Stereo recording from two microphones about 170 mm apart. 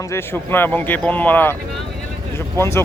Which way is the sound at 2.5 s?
15° left (ahead or behind).